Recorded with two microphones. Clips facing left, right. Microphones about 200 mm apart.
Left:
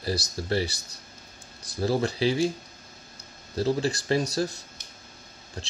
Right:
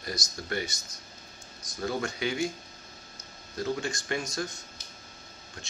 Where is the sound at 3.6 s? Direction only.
35° left (ahead or behind).